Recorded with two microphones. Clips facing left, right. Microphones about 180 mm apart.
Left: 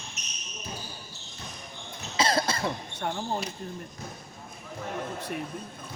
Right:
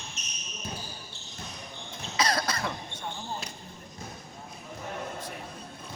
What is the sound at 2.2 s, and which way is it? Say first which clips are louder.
Cough: left 3 dB; 25° left (ahead or behind).